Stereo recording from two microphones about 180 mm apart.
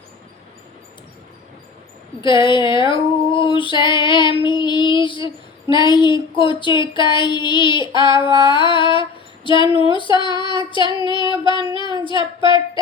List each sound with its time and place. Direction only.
2.2 s female singing: 25° left (ahead or behind)
12.0 s child singing: 25° left (ahead or behind)